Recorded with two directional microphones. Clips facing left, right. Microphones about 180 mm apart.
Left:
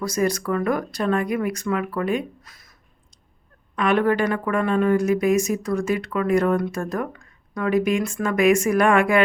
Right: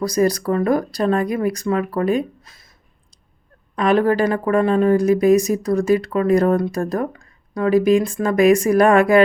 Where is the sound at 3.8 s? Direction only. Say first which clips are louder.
Right 3 dB; 35° right (ahead or behind).